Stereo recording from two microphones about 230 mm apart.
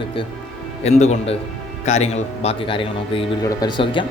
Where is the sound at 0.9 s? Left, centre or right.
Left.